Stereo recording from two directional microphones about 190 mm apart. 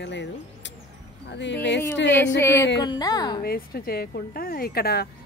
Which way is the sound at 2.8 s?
20° left (ahead or behind).